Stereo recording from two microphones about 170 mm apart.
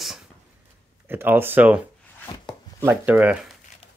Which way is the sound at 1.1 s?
10° right (ahead or behind).